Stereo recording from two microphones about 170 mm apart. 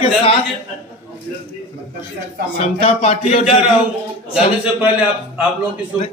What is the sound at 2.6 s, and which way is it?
Speech, 35° left (ahead or behind).